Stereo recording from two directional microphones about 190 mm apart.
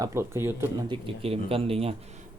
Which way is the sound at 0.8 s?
25° right (ahead or behind).